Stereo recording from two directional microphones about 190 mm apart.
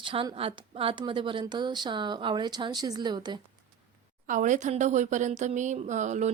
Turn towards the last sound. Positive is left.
turn(degrees=-40)  # may be behind; listen again after turning